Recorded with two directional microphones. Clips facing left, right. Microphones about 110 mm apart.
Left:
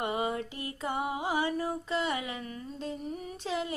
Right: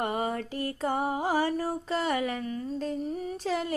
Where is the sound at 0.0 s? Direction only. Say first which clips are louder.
Right 2 dB; 45° right (ahead or behind).